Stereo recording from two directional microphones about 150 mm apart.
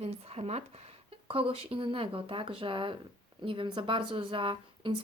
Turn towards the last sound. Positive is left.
turn(degrees=-35)  # may be behind; listen again after turning